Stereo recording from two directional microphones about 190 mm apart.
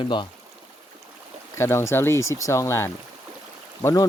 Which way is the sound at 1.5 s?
15° left (ahead or behind).